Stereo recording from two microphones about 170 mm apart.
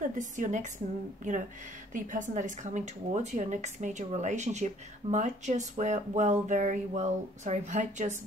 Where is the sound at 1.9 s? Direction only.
50° right (ahead or behind).